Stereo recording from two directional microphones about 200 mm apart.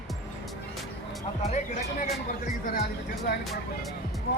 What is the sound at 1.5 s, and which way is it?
Speech, 35° left (ahead or behind).